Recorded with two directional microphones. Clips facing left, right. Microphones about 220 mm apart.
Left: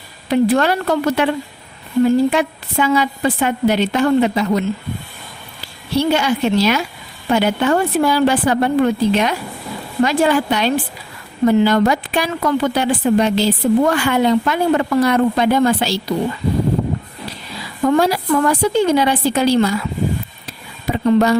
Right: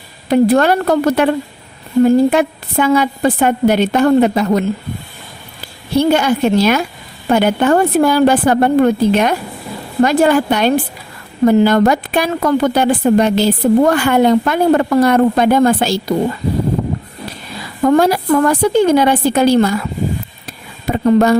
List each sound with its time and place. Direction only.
0.3 s a woman's voice: 45° right (ahead or behind)
5.9 s a woman's voice: 50° right (ahead or behind)
17.8 s a woman's voice: 50° right (ahead or behind)
20.9 s a woman's voice: 45° right (ahead or behind)